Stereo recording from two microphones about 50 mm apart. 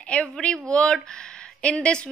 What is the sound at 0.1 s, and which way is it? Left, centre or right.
A woman's voice, left.